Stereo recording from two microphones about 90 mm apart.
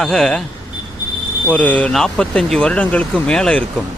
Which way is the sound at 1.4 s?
15° left (ahead or behind).